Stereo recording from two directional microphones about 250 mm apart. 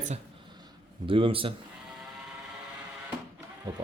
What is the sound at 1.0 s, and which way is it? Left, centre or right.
Speech, right.